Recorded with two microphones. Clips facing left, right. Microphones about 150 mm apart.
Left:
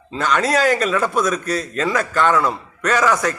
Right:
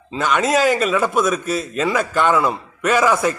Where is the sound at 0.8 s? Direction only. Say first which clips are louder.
Right 1 dB; 5° right (ahead or behind).